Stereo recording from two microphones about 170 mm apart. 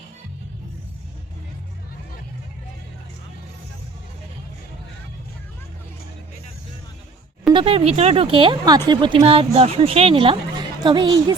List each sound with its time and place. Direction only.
7.5 s a woman's voice: 35° right (ahead or behind)